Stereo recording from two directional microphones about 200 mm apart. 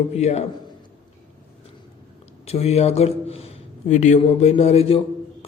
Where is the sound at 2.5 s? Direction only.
30° left (ahead or behind).